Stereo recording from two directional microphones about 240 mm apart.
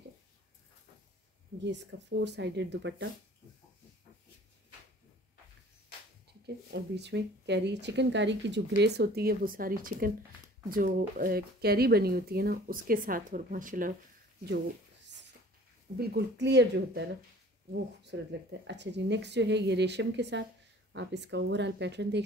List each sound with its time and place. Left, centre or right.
1.6 s speech: right
6.4 s speech: right
16.0 s speech: right